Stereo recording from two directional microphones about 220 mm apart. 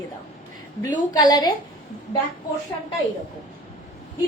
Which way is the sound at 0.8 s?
15° left (ahead or behind).